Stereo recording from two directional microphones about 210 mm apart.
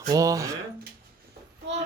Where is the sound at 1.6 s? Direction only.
55° right (ahead or behind).